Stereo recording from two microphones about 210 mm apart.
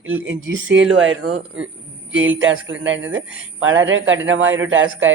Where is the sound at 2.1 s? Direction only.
65° right (ahead or behind).